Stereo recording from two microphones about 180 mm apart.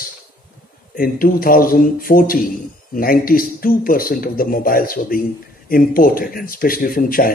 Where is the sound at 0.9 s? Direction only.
55° left (ahead or behind).